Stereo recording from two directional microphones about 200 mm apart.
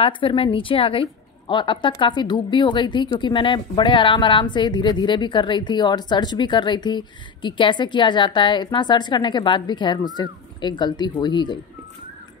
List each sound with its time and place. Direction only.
0.0 s a woman's voice: 25° left (ahead or behind)